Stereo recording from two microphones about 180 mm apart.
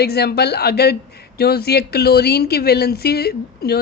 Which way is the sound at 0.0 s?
60° left (ahead or behind).